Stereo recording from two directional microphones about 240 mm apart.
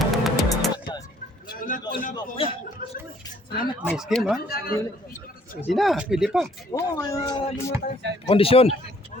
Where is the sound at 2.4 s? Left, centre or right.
Left.